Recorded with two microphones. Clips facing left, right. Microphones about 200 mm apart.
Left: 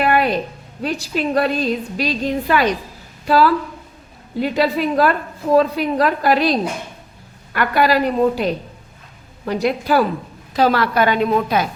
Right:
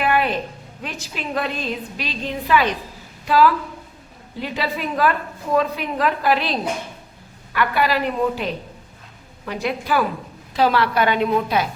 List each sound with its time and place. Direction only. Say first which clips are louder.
0.0 s music: left 3 dB; 40° left (ahead or behind)
0.8 s a woman's voice: left 10 dB; 35° left (ahead or behind)
9.5 s a woman's voice: left 5 dB; 40° left (ahead or behind)